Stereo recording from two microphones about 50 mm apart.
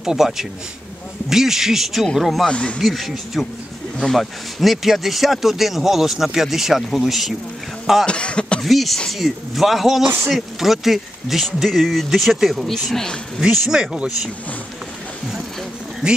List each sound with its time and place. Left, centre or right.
0.0 s a man's voice: centre
2.4 s speech: left
2.8 s speech: centre
8.0 s speech: left
8.6 s speech: centre
13.4 s a man's voice: centre
16.0 s a man's voice: centre